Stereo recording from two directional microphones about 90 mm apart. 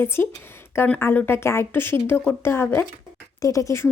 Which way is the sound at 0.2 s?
20° left (ahead or behind).